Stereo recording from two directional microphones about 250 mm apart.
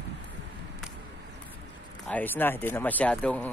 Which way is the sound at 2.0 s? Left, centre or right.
Centre.